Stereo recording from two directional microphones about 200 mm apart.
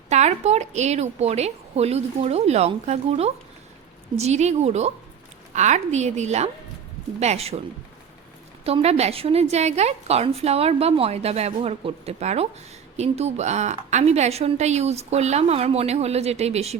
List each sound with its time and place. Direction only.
0.1 s a woman's voice: 35° right (ahead or behind)
8.6 s a woman's voice: 30° right (ahead or behind)